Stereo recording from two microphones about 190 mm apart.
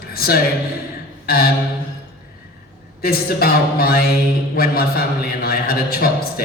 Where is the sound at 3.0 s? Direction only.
55° left (ahead or behind).